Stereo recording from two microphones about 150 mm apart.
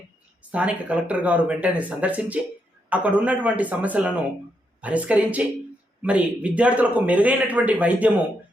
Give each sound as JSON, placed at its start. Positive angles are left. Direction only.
{"t": 0.5, "sound": "a man's voice", "side_deg": -10}